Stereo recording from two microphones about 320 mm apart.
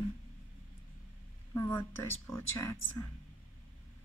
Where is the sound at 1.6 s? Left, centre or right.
Centre.